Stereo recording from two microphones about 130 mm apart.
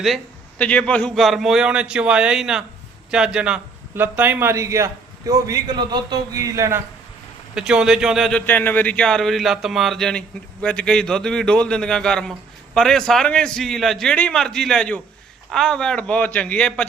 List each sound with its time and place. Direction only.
0.6 s a man's voice: 10° left (ahead or behind); by 6.8 s 20° right (ahead or behind)
7.5 s speech: 5° right (ahead or behind)
8.3 s speech: 10° left (ahead or behind)